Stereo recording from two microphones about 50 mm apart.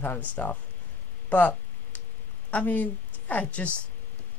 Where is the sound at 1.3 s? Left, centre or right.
Left.